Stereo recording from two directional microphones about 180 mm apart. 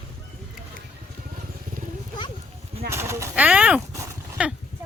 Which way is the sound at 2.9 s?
15° right (ahead or behind).